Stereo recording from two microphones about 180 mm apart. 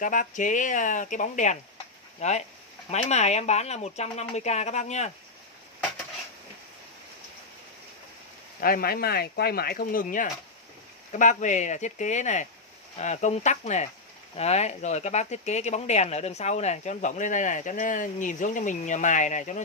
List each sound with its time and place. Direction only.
0.0 s speech: 45° left (ahead or behind)
8.5 s speech: 55° left (ahead or behind)